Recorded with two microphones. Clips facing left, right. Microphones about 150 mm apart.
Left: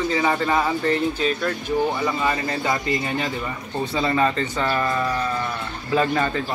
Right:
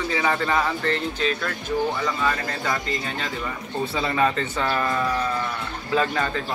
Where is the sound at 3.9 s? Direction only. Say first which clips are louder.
Left 2 dB; centre (ahead or behind).